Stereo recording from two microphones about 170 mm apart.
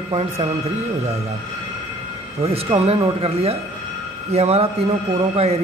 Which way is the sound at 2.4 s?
35° right (ahead or behind).